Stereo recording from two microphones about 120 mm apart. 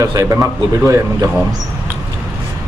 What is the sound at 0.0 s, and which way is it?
Speech, 30° right (ahead or behind).